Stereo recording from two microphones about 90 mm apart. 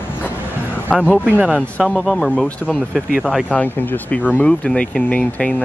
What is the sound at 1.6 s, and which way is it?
Speech, 10° left (ahead or behind).